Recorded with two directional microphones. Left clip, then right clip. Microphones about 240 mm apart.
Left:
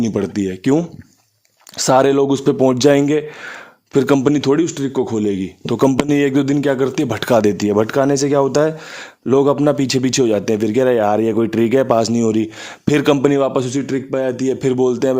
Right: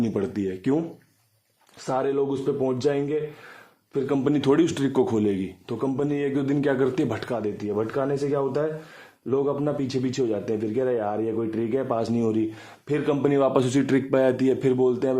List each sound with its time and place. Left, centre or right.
0.0 s speech: left
1.8 s speech: left
4.4 s speech: centre
5.8 s speech: left
12.9 s speech: left
13.3 s speech: centre